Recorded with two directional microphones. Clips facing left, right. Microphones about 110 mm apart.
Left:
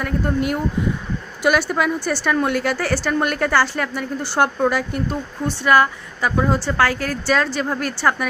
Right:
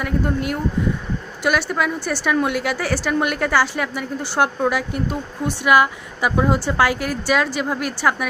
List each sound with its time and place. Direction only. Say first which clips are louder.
0.0 s a woman's voice: left 1 dB; centre (ahead or behind)